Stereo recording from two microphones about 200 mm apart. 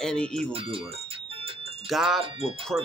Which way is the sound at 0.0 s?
5° left (ahead or behind).